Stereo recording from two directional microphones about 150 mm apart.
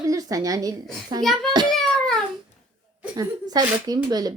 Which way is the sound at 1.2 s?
Centre (ahead or behind).